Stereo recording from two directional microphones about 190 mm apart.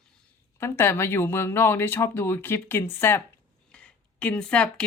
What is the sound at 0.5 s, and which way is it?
Speech, 15° left (ahead or behind).